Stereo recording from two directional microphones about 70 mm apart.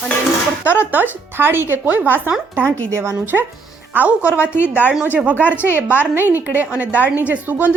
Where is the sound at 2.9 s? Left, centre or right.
Right.